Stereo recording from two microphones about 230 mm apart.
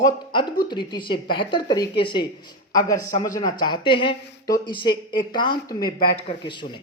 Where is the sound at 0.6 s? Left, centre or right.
Centre.